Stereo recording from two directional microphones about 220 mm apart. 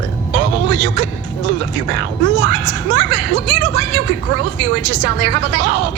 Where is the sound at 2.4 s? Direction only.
55° right (ahead or behind).